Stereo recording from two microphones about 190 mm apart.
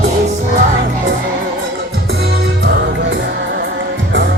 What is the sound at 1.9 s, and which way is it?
Music, 55° right (ahead or behind).